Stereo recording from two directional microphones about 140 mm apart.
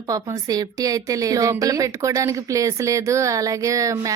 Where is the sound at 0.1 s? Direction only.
25° right (ahead or behind).